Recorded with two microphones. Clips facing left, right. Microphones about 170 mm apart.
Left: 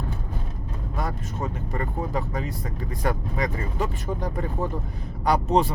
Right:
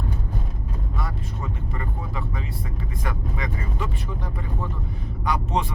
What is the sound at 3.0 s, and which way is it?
Speech, 40° left (ahead or behind).